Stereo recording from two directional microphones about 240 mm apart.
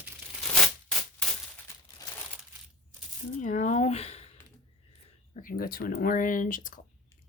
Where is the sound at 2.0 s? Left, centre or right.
Centre.